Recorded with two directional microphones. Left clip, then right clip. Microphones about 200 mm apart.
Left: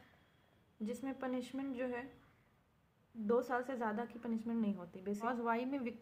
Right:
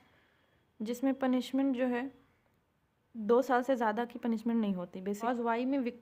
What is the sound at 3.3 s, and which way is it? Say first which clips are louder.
A woman's voice: right 8 dB; 60° right (ahead or behind).